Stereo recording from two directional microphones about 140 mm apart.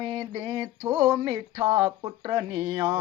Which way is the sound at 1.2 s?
40° right (ahead or behind).